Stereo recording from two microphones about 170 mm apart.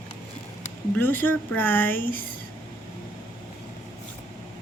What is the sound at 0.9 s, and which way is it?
A woman's voice, 10° left (ahead or behind).